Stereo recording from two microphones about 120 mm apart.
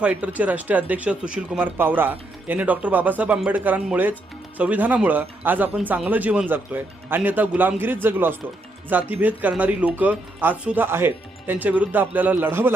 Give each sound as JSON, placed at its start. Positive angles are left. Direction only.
{"t": 0.0, "sound": "speech", "side_deg": -10}